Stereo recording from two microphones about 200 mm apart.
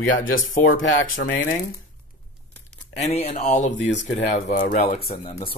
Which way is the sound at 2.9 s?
35° left (ahead or behind).